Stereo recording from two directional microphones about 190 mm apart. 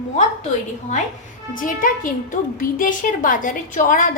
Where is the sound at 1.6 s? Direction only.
45° left (ahead or behind).